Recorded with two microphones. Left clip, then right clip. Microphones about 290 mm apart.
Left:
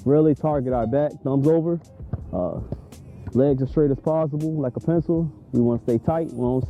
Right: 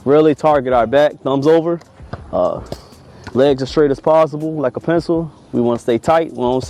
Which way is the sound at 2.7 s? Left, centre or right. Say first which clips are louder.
Right 8 dB; centre.